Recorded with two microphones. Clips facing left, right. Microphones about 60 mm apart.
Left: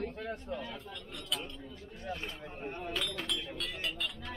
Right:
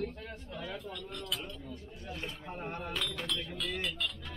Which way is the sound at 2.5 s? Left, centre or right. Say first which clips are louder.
Even; right.